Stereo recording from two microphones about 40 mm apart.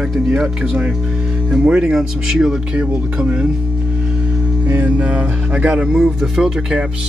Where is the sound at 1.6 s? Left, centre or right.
Right.